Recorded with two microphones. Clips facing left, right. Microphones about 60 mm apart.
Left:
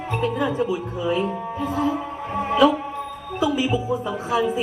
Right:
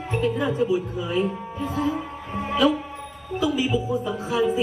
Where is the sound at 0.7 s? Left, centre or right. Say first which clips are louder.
Left 1 dB; left.